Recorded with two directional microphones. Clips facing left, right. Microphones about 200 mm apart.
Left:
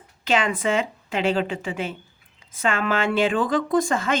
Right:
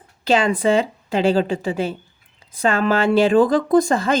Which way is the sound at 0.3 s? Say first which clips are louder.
Right 5 dB; 35° right (ahead or behind).